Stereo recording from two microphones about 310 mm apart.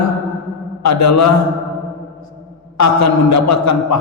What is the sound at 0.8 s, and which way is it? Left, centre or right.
Speech, left.